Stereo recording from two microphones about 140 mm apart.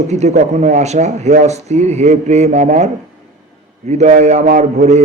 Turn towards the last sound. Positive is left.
turn(degrees=-55)  # may be behind; listen again after turning